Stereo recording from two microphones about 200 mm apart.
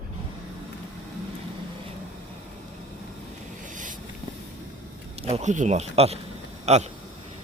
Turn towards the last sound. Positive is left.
turn(degrees=-35)  # may be behind; listen again after turning